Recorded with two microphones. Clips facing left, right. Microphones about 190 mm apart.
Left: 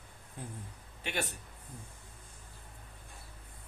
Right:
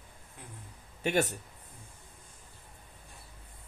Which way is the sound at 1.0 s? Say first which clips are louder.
Right 9 dB; 45° right (ahead or behind).